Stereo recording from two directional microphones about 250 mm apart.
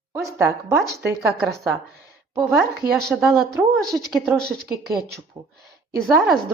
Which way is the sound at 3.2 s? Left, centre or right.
Centre.